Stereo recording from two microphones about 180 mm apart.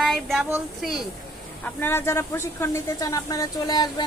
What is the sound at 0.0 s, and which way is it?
Speech, centre (ahead or behind).